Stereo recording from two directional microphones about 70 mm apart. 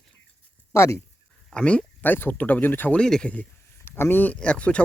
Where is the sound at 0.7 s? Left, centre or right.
Left.